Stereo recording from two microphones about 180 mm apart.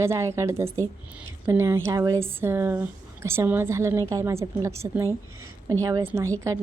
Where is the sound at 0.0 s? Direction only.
15° right (ahead or behind).